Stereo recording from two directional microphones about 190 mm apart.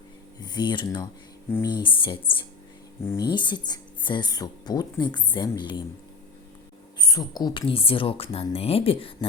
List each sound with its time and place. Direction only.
0.3 s speech: 25° left (ahead or behind)
3.0 s speech: 15° left (ahead or behind)
3.3 s speech: 25° left (ahead or behind)
7.0 s speech: 20° left (ahead or behind)